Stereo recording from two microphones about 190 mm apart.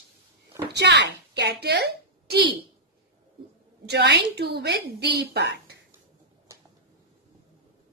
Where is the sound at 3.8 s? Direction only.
60° right (ahead or behind).